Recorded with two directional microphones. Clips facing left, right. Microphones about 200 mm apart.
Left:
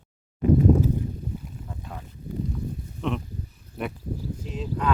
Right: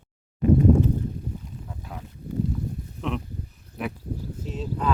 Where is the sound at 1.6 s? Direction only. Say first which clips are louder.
Even; centre (ahead or behind).